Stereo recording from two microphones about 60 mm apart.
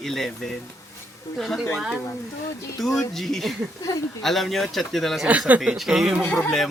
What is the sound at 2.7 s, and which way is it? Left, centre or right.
Speech, centre.